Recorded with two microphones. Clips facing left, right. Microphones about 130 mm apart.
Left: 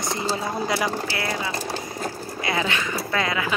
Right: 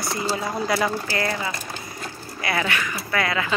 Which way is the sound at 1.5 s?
35° left (ahead or behind).